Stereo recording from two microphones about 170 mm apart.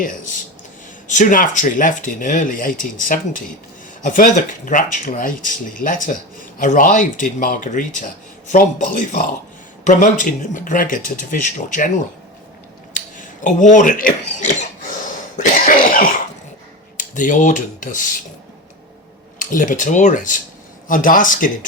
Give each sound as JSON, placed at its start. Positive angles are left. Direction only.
{"t": 1.0, "sound": "speech", "side_deg": 50}
{"t": 12.9, "sound": "a sound", "side_deg": 50}
{"t": 15.0, "sound": "cough", "side_deg": 50}
{"t": 17.0, "sound": "speech", "side_deg": 50}
{"t": 19.4, "sound": "speech", "side_deg": 50}